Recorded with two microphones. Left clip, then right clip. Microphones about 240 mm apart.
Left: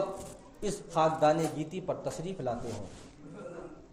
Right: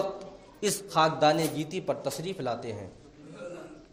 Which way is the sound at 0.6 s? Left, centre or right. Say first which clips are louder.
Right 3 dB; right.